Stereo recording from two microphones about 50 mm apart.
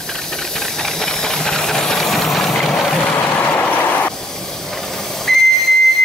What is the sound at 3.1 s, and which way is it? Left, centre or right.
Vehicle, left.